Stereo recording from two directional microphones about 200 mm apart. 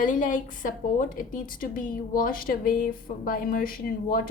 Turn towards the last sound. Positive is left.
turn(degrees=45)  # may be behind; listen again after turning